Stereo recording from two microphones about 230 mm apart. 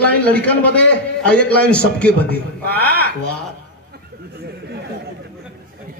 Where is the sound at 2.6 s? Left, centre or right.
Right.